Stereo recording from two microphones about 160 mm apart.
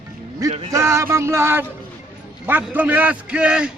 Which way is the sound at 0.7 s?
20° right (ahead or behind).